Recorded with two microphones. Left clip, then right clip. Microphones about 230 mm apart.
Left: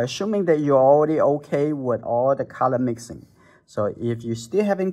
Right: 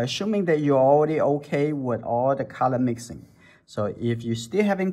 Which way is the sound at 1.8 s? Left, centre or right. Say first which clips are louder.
Left 3 dB; left.